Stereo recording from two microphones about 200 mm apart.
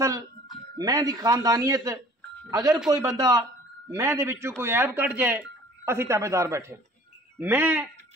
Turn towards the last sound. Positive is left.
turn(degrees=-10)  # may be behind; listen again after turning